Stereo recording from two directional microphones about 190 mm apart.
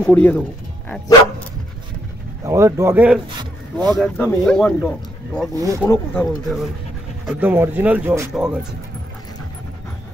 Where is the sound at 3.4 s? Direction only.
20° right (ahead or behind).